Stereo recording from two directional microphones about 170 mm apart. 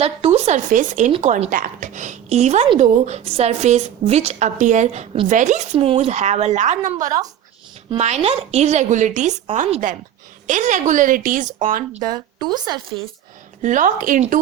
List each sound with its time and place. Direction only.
0.0 s a woman's voice: 40° right (ahead or behind)
5.3 s speech: 45° right (ahead or behind)
5.7 s a woman's voice: 30° right (ahead or behind); by 12.1 s 55° right (ahead or behind)
12.1 s speech: 25° right (ahead or behind)
13.6 s speech: 50° right (ahead or behind)